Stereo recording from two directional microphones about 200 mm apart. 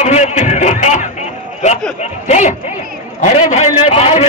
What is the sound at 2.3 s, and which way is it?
A man's voice, 35° left (ahead or behind).